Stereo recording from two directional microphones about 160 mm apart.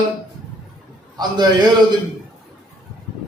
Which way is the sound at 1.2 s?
25° right (ahead or behind).